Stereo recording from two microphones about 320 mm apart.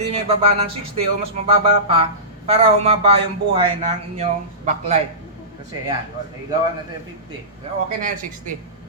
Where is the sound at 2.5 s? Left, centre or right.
Centre.